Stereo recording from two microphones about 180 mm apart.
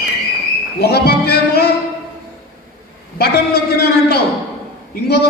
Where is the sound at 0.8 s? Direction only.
60° left (ahead or behind).